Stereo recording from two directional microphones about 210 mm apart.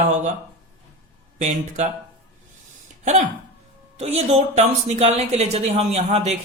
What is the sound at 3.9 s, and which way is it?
Speech, 30° right (ahead or behind).